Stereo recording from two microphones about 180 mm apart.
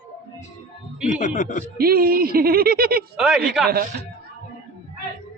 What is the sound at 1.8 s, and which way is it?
A man's voice, 55° right (ahead or behind).